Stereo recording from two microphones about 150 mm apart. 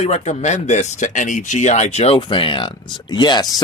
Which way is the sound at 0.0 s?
50° left (ahead or behind).